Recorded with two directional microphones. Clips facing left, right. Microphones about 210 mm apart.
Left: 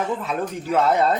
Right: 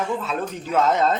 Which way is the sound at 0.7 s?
10° left (ahead or behind).